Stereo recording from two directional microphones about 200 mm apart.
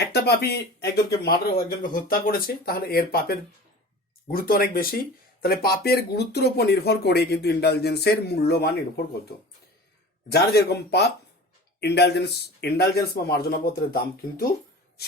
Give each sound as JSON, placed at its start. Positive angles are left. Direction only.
{"t": 0.0, "sound": "speech", "side_deg": 55}
{"t": 10.2, "sound": "speech", "side_deg": 55}